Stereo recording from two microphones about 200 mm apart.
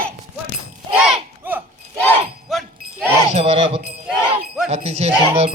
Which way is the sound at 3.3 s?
30° right (ahead or behind).